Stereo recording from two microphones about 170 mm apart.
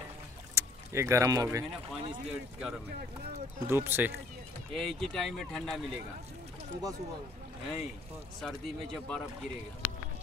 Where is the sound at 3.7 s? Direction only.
10° right (ahead or behind).